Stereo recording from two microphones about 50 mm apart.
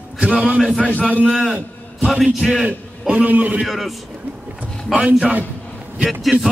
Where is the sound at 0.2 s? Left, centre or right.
Right.